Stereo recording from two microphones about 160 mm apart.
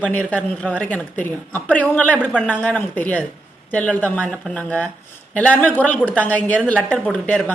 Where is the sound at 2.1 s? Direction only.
5° right (ahead or behind).